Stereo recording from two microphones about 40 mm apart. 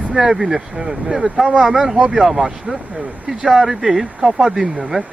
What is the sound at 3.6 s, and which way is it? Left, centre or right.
Speech, centre.